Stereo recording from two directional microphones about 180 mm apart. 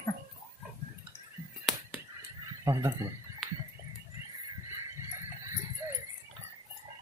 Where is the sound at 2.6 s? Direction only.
15° right (ahead or behind).